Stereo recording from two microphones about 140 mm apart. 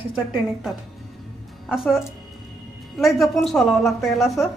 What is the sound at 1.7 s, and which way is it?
A woman's voice, 5° right (ahead or behind).